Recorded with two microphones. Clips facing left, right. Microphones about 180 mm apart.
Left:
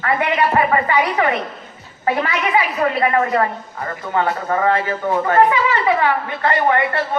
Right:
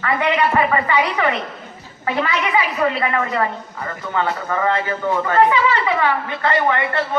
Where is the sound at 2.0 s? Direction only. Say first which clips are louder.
Left 2 dB; 35° left (ahead or behind).